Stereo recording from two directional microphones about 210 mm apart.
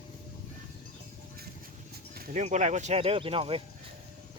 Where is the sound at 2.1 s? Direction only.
40° right (ahead or behind).